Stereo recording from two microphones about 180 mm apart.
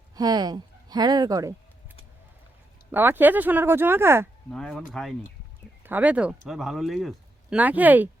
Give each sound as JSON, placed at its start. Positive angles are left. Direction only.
{"t": 0.2, "sound": "speech", "side_deg": -20}
{"t": 2.9, "sound": "speech", "side_deg": -10}
{"t": 4.5, "sound": "speech", "side_deg": 0}